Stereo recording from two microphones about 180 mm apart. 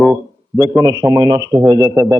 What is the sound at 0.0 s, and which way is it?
A man's voice, 10° right (ahead or behind).